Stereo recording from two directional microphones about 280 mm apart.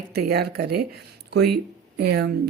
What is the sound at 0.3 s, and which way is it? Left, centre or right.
Speech, right.